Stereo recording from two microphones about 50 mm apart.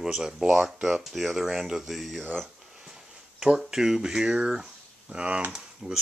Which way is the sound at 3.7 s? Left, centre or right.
Centre.